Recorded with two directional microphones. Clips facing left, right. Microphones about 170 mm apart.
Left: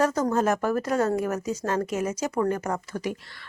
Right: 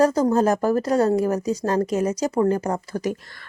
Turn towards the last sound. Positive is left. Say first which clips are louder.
# right 5 dB
turn(degrees=-45)  # may be behind; listen again after turning